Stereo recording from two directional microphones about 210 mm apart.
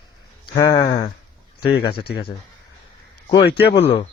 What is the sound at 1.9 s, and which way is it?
Speech, 50° left (ahead or behind).